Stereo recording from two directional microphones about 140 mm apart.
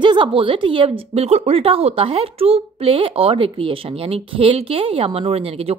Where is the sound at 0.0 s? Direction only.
35° right (ahead or behind).